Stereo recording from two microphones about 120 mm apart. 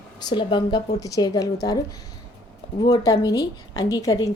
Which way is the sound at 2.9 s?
30° left (ahead or behind).